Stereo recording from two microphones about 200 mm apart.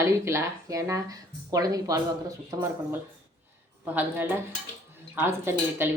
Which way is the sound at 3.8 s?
10° right (ahead or behind).